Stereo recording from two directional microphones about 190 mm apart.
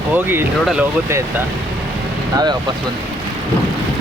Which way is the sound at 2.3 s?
20° right (ahead or behind).